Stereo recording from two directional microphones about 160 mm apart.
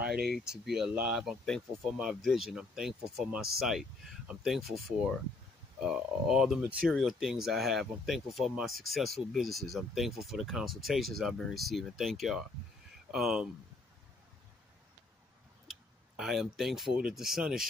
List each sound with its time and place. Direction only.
0.1 s speech: 75° right (ahead or behind)
0.4 s speech: 5° right (ahead or behind)
5.8 s speech: 5° right (ahead or behind)
15.7 s speech: centre (ahead or behind)